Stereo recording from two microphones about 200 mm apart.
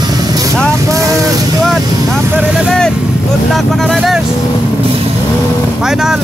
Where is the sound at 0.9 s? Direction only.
15° right (ahead or behind).